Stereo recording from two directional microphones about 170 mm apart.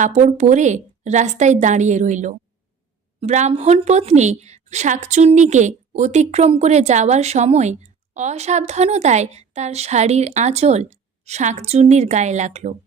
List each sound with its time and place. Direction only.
0.0 s a woman's voice: 45° right (ahead or behind)